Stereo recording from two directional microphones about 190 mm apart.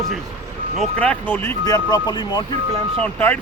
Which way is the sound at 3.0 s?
10° left (ahead or behind).